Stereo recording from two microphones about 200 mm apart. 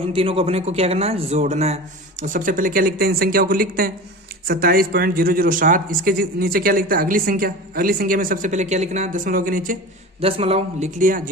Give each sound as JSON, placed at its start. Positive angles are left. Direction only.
{"t": 0.1, "sound": "speech", "side_deg": -30}
{"t": 10.2, "sound": "speech", "side_deg": -30}